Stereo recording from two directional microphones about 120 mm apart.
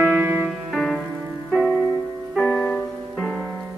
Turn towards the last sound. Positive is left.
turn(degrees=15)  # may be behind; listen again after turning